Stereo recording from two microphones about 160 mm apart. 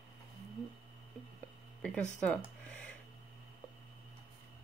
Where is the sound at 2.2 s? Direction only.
10° left (ahead or behind).